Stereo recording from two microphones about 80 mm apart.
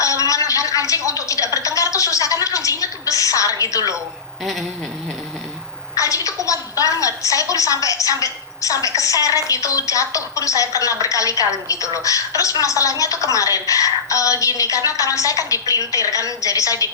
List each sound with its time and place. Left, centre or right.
0.0 s a sound: left
1.5 s a woman's voice: left
6.0 s a woman's voice: left